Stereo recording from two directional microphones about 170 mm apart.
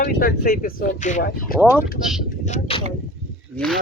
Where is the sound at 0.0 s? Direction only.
60° left (ahead or behind).